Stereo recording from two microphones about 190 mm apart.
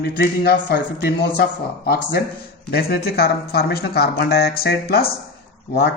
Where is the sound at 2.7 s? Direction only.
55° left (ahead or behind).